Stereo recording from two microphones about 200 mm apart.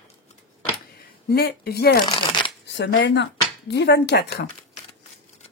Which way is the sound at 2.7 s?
60° left (ahead or behind).